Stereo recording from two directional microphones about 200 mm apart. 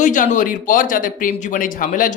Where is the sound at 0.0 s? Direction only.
40° left (ahead or behind).